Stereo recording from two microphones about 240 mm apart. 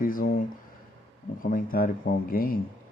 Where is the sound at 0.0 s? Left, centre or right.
Left.